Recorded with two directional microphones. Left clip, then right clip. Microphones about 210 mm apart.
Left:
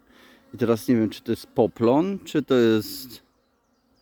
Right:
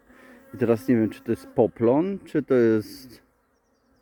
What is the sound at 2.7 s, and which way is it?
Speech, 30° left (ahead or behind).